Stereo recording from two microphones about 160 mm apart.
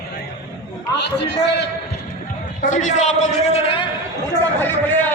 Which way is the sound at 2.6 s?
50° left (ahead or behind).